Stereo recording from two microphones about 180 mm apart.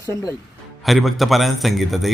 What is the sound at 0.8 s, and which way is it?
A man's voice, centre (ahead or behind).